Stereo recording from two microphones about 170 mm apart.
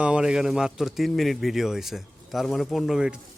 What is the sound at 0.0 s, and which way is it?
A man's voice, 5° right (ahead or behind).